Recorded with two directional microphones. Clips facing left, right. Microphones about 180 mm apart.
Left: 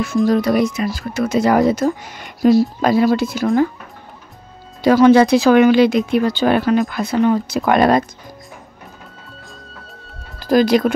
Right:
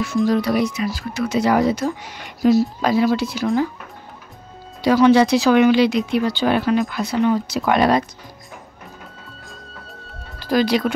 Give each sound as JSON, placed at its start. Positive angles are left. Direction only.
{"t": 0.3, "sound": "speech", "side_deg": 50}
{"t": 4.8, "sound": "speech", "side_deg": 50}
{"t": 9.4, "sound": "music", "side_deg": 0}
{"t": 10.4, "sound": "speech", "side_deg": 45}